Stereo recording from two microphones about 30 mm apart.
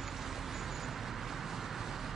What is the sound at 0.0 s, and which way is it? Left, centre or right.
Vehicle, centre.